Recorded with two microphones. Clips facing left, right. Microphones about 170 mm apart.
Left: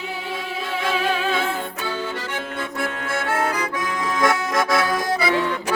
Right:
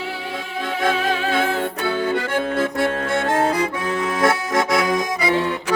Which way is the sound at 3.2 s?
35° right (ahead or behind).